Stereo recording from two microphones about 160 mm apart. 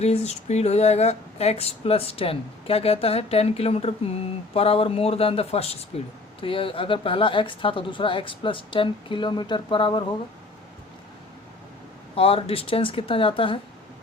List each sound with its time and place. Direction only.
0.0 s speech: 40° left (ahead or behind)
12.1 s speech: 35° left (ahead or behind)